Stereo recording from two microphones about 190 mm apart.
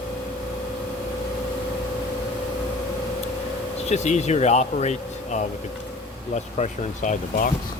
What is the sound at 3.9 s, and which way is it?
Speech, 35° left (ahead or behind).